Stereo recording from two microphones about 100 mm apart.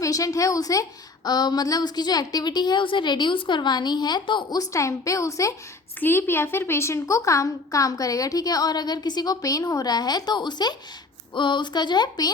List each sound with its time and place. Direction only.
0.0 s a woman's voice: 35° left (ahead or behind)
4.6 s a woman's voice: 30° left (ahead or behind)
6.0 s a woman's voice: 20° left (ahead or behind); by 12.3 s 45° left (ahead or behind)